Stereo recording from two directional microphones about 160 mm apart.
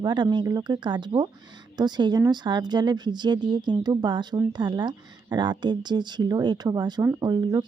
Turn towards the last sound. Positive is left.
turn(degrees=-25)  # may be behind; listen again after turning